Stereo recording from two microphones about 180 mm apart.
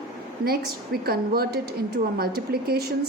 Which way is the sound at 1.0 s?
60° right (ahead or behind).